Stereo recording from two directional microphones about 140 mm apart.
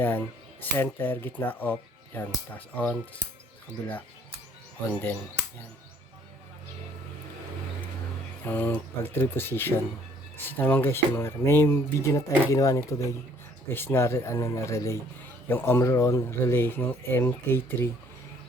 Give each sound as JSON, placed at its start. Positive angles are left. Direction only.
{"t": 0.0, "sound": "speech", "side_deg": 15}
{"t": 4.9, "sound": "speech", "side_deg": 15}
{"t": 8.4, "sound": "speech", "side_deg": 15}